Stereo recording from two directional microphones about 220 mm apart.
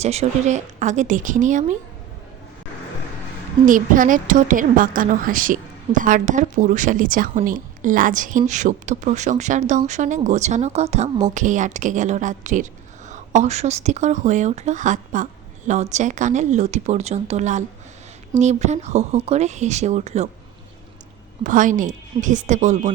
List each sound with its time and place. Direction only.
0.0 s a woman's voice: 30° right (ahead or behind)
3.7 s a woman's voice: 35° right (ahead or behind)
21.4 s a woman's voice: 35° right (ahead or behind)